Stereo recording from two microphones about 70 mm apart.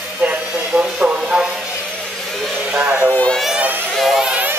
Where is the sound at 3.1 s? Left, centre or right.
Centre.